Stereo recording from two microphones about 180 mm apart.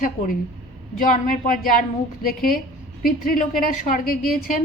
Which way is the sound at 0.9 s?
50° left (ahead or behind).